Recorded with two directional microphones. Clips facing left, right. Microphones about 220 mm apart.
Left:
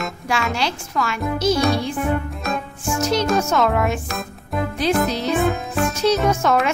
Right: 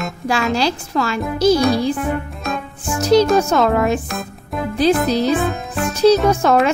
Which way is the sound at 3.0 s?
35° right (ahead or behind).